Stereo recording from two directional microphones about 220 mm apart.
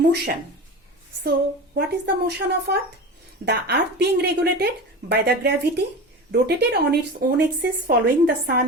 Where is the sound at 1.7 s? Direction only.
50° right (ahead or behind).